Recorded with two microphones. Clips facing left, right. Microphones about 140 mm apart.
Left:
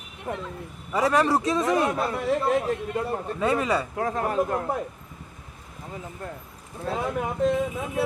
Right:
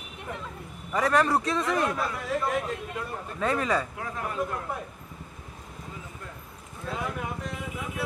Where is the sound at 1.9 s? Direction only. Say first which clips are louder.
Left 5 dB; 30° left (ahead or behind).